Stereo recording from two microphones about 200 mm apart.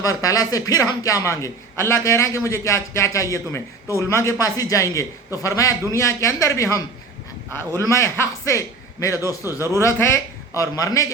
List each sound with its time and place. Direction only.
0.0 s a man's voice: 15° left (ahead or behind)